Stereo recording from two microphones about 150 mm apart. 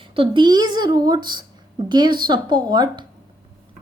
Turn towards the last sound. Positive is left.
turn(degrees=-30)  # may be behind; listen again after turning